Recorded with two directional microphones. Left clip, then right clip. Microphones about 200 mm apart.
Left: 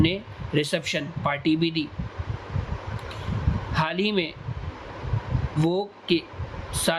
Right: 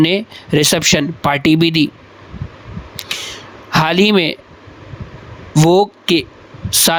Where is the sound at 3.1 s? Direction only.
50° right (ahead or behind).